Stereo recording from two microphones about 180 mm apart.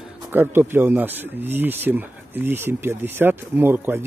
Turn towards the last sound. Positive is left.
turn(degrees=-10)  # may be behind; listen again after turning